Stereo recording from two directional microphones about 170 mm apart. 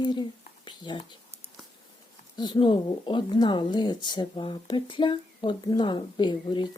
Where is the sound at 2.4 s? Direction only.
25° left (ahead or behind).